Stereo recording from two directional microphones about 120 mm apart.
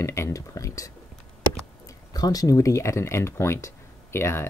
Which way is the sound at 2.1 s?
30° left (ahead or behind).